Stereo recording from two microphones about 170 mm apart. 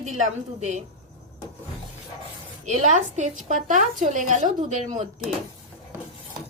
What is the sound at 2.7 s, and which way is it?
A woman's voice, 45° right (ahead or behind).